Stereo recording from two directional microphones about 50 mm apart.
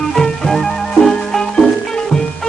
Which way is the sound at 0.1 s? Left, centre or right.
Centre.